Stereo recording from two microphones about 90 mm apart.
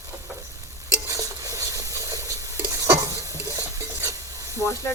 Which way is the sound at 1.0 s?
40° right (ahead or behind).